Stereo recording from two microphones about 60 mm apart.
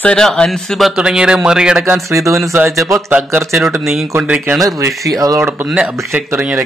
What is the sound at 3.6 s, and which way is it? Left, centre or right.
Speech, centre.